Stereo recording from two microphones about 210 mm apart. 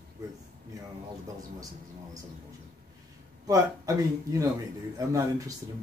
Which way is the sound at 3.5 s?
15° right (ahead or behind).